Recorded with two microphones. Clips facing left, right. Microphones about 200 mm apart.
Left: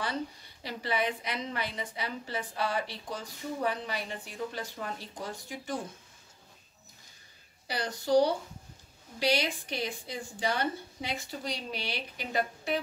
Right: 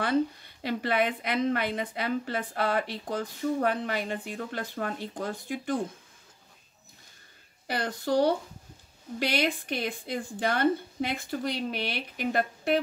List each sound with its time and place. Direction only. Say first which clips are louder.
0.0 s a woman's voice: right 9 dB; 55° right (ahead or behind)
7.6 s a woman's voice: right 3 dB; 55° right (ahead or behind)